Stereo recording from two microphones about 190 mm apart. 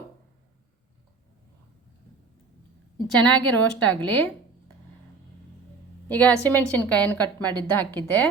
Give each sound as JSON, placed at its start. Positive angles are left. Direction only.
{"t": 3.2, "sound": "a woman's voice", "side_deg": 10}
{"t": 6.1, "sound": "a woman's voice", "side_deg": 5}